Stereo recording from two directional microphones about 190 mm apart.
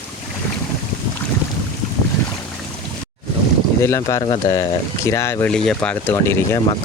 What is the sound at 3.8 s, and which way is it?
Speech, 15° left (ahead or behind).